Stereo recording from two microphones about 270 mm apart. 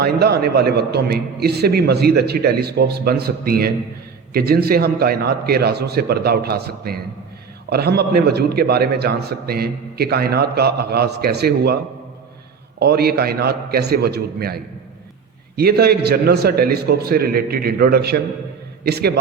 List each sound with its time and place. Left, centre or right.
0.0 s a man's voice: right
12.8 s a man's voice: right